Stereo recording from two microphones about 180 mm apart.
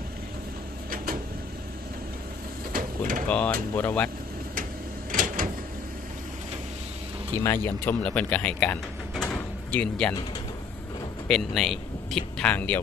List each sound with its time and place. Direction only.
0.8 s a sound: 55° right (ahead or behind)
2.7 s mechanisms: 50° right (ahead or behind)
3.3 s speech: 5° left (ahead or behind)
5.1 s a sound: 50° right (ahead or behind)
7.4 s speech: 15° left (ahead or behind)
11.2 s speech: 5° left (ahead or behind)